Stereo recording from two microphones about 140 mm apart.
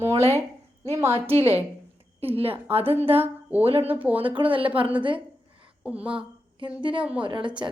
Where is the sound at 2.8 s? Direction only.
15° right (ahead or behind).